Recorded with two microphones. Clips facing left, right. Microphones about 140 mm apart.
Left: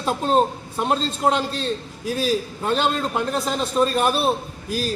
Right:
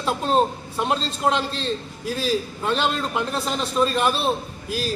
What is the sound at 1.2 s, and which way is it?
A man's voice, 45° left (ahead or behind).